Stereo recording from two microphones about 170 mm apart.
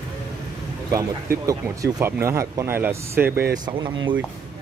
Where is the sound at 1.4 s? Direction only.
20° right (ahead or behind).